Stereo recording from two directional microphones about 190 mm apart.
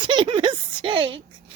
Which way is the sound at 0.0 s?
25° right (ahead or behind).